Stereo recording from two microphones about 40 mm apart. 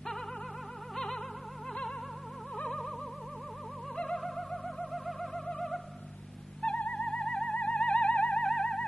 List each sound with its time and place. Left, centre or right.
0.9 s music: centre
3.9 s music: centre
4.5 s music: centre
6.6 s music: left
8.4 s theremin: centre